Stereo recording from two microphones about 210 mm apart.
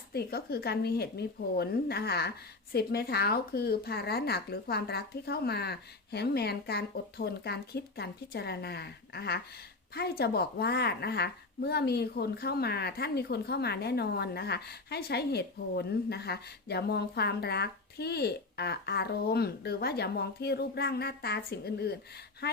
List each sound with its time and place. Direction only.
0.1 s a woman's voice: 45° left (ahead or behind)